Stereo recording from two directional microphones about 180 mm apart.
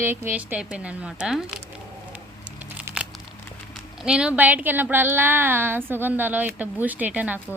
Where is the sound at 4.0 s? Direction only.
5° right (ahead or behind).